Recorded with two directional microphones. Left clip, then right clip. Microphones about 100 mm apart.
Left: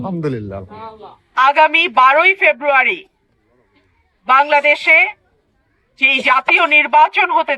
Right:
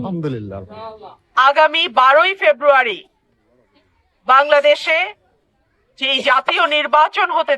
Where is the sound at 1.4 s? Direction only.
25° right (ahead or behind).